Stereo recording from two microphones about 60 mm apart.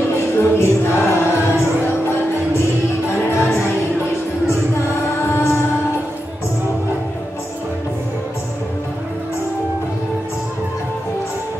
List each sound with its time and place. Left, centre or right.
0.1 s music: left
5.2 s music: left